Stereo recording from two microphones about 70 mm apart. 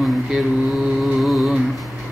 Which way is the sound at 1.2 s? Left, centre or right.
Centre.